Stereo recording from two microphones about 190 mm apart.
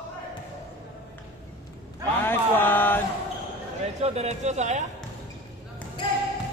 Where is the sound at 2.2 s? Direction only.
10° left (ahead or behind).